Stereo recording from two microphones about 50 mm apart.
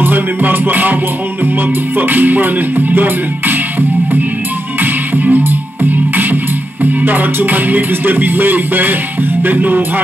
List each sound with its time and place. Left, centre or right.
0.0 s music: right
2.0 s music: right
5.1 s music: right